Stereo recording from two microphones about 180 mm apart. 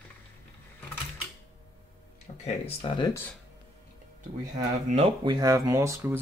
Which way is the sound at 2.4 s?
25° left (ahead or behind).